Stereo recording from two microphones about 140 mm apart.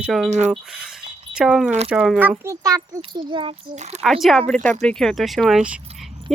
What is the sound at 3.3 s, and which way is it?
Speech, 35° right (ahead or behind).